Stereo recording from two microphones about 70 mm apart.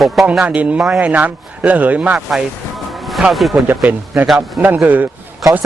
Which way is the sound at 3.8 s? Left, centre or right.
Right.